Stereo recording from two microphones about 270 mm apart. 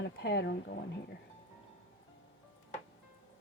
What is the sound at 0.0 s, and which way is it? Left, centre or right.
Speech, left.